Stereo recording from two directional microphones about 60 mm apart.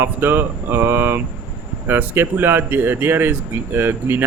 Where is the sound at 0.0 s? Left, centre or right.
Right.